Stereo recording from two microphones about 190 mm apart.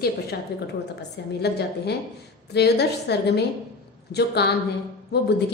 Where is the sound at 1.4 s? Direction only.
60° left (ahead or behind).